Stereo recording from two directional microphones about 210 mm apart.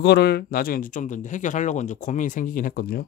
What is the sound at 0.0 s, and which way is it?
Speech, 50° left (ahead or behind).